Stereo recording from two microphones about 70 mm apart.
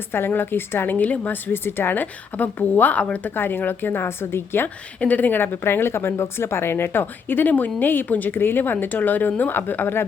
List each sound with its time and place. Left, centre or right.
0.1 s a woman's voice: left
3.3 s a woman's voice: left
4.9 s a woman's voice: left